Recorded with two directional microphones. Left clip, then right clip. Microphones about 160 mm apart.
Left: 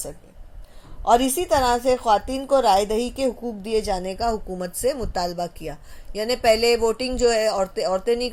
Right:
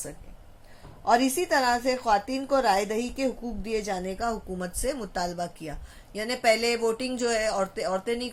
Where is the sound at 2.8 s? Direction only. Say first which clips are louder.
Left 6 dB; 60° left (ahead or behind).